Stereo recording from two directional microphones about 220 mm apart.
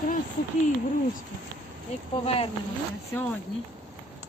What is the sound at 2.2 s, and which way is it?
Speech, 25° left (ahead or behind).